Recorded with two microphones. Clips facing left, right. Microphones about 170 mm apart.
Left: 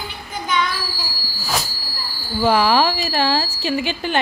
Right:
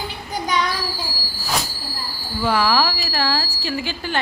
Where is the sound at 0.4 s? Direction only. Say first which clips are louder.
Left 1 dB; 40° right (ahead or behind).